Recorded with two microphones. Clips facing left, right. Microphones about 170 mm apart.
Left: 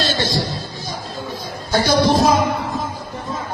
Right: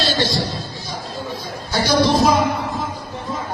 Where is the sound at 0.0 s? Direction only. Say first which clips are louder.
Right 1 dB; 45° left (ahead or behind).